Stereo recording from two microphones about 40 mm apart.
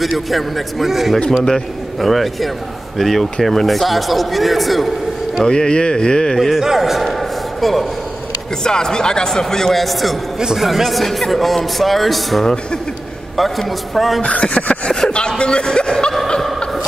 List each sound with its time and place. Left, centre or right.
0.3 s a man's voice: centre
5.4 s speech: centre
6.3 s a man's voice: centre
6.6 s a sound: centre
8.6 s speech: centre
9.8 s a man's voice: centre
14.2 s speech: left
15.0 s chuckle: left